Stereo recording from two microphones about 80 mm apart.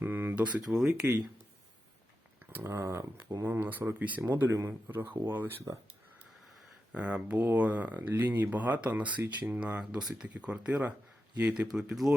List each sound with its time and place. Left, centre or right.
0.0 s a sound: right; by 0.9 s centre
2.6 s speech: right
5.7 s speech: right
6.9 s speech: centre